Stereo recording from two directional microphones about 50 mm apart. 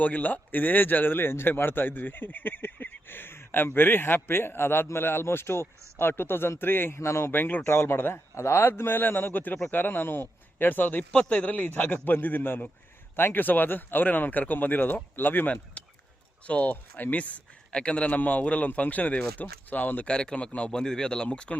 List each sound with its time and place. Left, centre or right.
0.0 s speech: left
7.3 s speech: left
8.8 s speech: left
11.1 s speech: left
15.8 s a sound: left
16.4 s a man's voice: left
20.1 s a man's voice: centre